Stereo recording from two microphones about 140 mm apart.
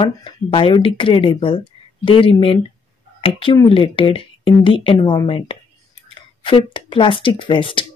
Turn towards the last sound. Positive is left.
turn(degrees=35)  # may be behind; listen again after turning